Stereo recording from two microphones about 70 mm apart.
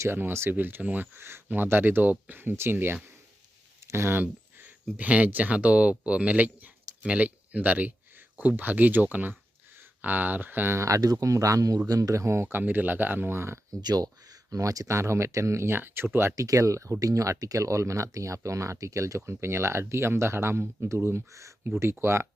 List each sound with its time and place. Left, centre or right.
0.0 s speech: right
10.8 s speech: right
13.8 s speech: right
14.5 s speech: right
16.3 s speech: right